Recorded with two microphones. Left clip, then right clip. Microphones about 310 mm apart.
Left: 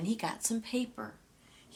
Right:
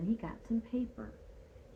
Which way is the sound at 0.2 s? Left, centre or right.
Centre.